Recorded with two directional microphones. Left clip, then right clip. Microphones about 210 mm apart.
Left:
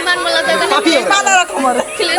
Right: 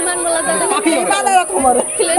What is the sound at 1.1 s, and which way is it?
Speech, 50° right (ahead or behind).